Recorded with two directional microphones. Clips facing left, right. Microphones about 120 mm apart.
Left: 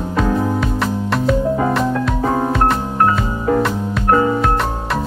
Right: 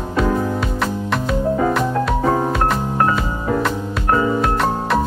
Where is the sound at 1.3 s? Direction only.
Centre (ahead or behind).